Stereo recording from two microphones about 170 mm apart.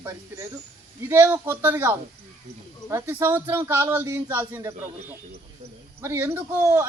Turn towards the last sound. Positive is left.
turn(degrees=-15)  # may be behind; listen again after turning